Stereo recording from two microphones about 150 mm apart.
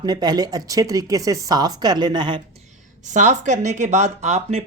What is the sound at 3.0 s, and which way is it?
Speech, 55° right (ahead or behind).